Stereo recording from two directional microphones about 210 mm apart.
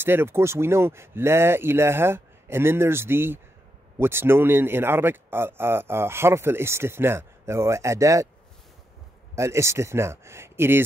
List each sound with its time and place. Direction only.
0.0 s speech: 10° right (ahead or behind)
9.3 s speech: 15° right (ahead or behind)